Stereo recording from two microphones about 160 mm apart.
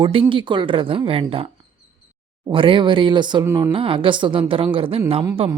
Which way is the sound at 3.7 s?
35° right (ahead or behind).